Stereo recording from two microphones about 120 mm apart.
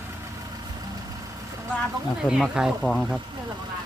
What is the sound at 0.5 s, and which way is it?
Vehicle, 30° right (ahead or behind).